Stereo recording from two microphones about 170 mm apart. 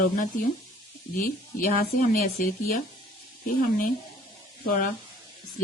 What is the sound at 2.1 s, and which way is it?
Speech, 55° left (ahead or behind).